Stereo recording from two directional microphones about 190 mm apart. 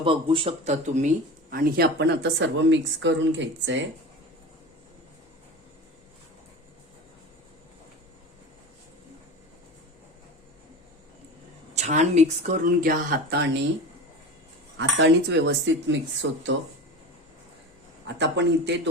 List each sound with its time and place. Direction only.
0.0 s speech: 25° right (ahead or behind); by 3.8 s 75° right (ahead or behind)
11.7 s speech: 35° right (ahead or behind); by 13.5 s 55° right (ahead or behind)
14.8 s speech: 70° right (ahead or behind)
16.2 s speech: 90° right
18.0 s speech: 70° right (ahead or behind)